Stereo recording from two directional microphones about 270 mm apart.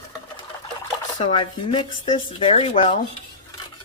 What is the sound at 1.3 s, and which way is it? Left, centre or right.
Speech, centre.